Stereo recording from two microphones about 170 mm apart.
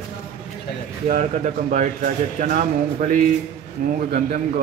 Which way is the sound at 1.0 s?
45° right (ahead or behind).